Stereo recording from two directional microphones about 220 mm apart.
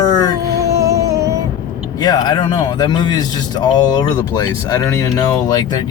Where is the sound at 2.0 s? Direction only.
20° left (ahead or behind).